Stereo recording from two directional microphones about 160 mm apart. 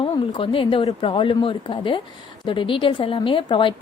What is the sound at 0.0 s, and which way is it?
A woman's voice, 35° left (ahead or behind).